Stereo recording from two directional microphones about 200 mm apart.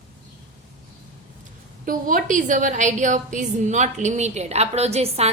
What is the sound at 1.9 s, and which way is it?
A woman's voice, 45° right (ahead or behind).